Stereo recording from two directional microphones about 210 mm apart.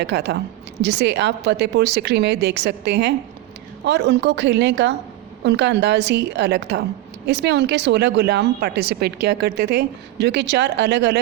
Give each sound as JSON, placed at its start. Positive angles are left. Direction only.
{"t": 0.0, "sound": "a woman's voice", "side_deg": -50}